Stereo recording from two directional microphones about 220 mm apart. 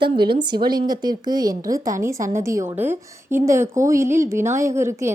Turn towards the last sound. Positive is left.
turn(degrees=-10)  # may be behind; listen again after turning